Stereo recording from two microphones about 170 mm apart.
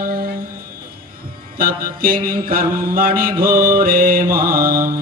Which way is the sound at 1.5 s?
60° right (ahead or behind).